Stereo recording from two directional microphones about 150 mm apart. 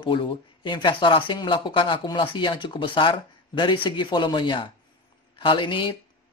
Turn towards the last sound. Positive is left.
turn(degrees=35)  # may be behind; listen again after turning